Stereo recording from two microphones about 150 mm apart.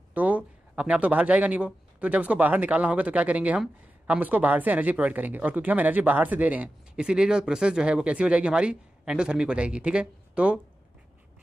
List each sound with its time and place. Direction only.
0.1 s speech: 10° right (ahead or behind)